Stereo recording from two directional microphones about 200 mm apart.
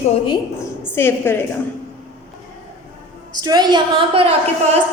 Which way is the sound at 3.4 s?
20° right (ahead or behind).